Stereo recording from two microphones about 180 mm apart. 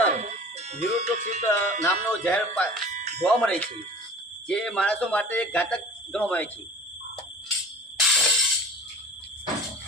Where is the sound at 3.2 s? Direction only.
5° left (ahead or behind).